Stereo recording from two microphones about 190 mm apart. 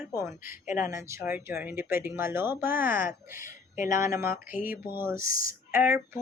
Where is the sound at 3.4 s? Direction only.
45° left (ahead or behind).